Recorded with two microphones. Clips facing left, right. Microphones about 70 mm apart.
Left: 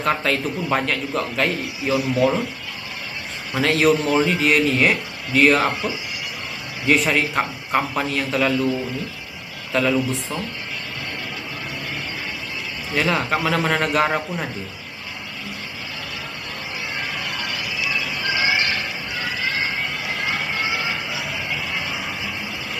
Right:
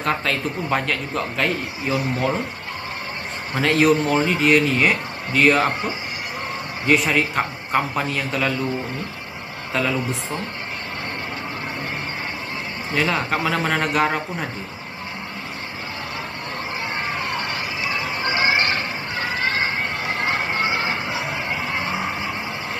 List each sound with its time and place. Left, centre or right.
0.0 s a man's voice: centre
2.0 s speech: right
3.6 s a man's voice: centre
6.9 s a man's voice: centre
9.7 s speech: centre
12.9 s a man's voice: centre
17.0 s a sound: right